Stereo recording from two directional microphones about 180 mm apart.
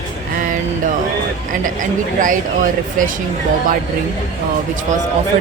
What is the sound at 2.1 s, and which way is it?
Speech, 45° right (ahead or behind).